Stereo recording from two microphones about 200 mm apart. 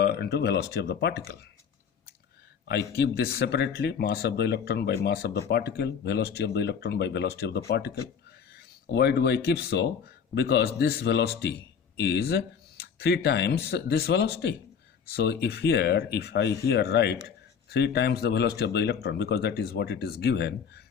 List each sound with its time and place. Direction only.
0.0 s speech: 55° left (ahead or behind)
2.6 s speech: 55° left (ahead or behind)